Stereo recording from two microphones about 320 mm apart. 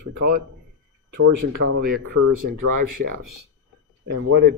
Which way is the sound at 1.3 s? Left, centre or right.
Right.